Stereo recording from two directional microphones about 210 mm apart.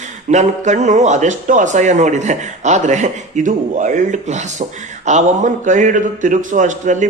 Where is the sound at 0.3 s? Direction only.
35° right (ahead or behind).